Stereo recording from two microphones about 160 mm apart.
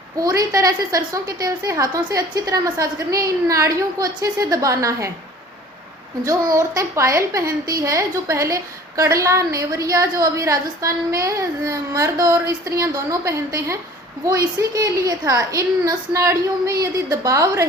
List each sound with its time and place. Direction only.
0.2 s a woman's voice: 20° right (ahead or behind)
6.2 s a woman's voice: 20° right (ahead or behind)